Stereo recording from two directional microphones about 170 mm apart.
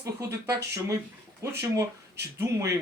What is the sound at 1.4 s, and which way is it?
Speech, 20° right (ahead or behind).